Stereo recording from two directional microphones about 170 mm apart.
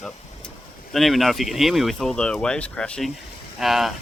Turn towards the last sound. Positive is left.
turn(degrees=0)  # may be behind; listen again after turning